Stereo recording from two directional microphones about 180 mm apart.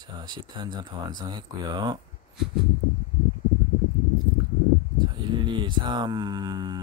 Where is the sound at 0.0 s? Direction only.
25° right (ahead or behind).